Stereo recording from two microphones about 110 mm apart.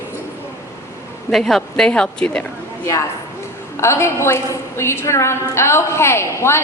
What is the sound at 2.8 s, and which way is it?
A woman's voice, 30° left (ahead or behind).